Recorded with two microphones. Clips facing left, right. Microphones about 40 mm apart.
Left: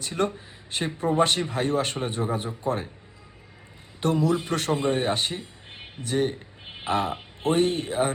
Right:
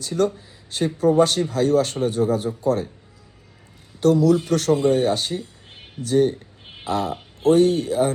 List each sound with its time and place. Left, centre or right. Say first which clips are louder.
0.0 s speech: right 5 dB; left
4.0 s speech: right 7 dB; left